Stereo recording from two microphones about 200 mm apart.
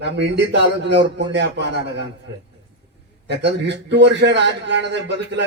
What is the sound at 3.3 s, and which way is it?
A man's voice, 60° right (ahead or behind).